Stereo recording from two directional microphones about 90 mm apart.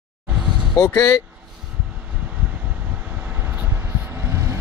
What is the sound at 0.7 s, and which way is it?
Speech, 30° left (ahead or behind).